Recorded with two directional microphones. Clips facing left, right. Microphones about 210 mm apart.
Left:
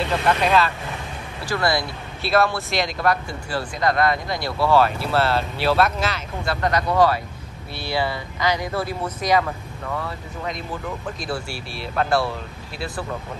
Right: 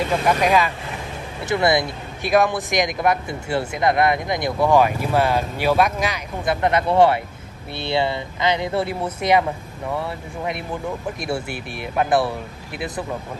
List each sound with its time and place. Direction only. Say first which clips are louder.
0.0 s speech: right 2 dB; 10° right (ahead or behind)